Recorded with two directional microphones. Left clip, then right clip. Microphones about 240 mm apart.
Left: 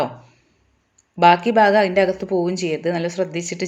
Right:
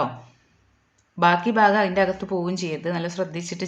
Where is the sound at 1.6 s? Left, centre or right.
Centre.